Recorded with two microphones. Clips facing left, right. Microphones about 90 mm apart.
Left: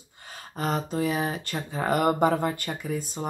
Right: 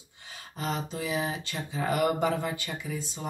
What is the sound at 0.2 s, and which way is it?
Speech, 45° left (ahead or behind).